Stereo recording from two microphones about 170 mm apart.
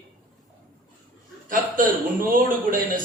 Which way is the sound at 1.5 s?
55° right (ahead or behind).